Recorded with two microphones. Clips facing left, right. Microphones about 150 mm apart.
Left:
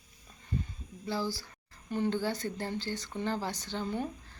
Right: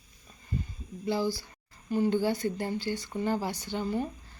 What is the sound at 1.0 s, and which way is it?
A woman's voice, 15° right (ahead or behind).